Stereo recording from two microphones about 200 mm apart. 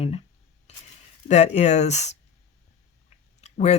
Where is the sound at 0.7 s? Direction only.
35° left (ahead or behind).